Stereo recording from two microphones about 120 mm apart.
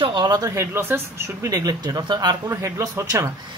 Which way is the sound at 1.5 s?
35° right (ahead or behind).